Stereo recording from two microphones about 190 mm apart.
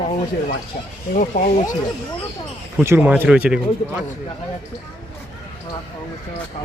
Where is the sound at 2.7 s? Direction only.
10° right (ahead or behind).